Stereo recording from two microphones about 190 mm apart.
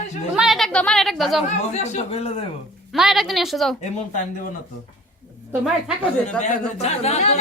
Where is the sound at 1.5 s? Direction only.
35° left (ahead or behind).